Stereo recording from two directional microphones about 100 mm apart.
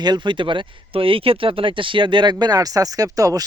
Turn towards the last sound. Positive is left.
turn(degrees=-35)  # may be behind; listen again after turning